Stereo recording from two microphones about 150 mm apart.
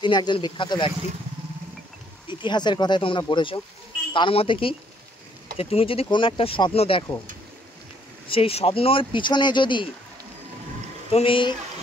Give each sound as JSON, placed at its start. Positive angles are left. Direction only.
{"t": 0.0, "sound": "speech", "side_deg": 30}
{"t": 2.2, "sound": "speech", "side_deg": 30}
{"t": 8.3, "sound": "speech", "side_deg": 40}
{"t": 11.1, "sound": "speech", "side_deg": 40}